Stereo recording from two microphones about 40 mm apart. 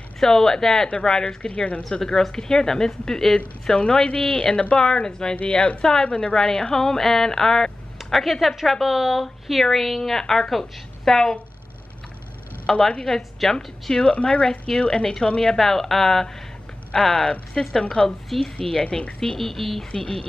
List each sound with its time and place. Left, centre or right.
0.2 s a woman's voice: centre
0.8 s a woman's voice: left
1.8 s a woman's voice: centre
3.6 s a woman's voice: left
8.0 s a woman's voice: centre
12.7 s a woman's voice: centre
13.9 s a woman's voice: left
15.5 s a woman's voice: centre
16.9 s a woman's voice: centre
19.9 s a woman's voice: left